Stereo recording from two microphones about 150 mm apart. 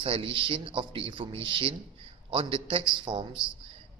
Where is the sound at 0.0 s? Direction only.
35° right (ahead or behind).